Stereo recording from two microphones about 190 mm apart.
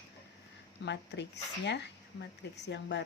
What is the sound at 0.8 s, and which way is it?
A woman's voice, 65° left (ahead or behind).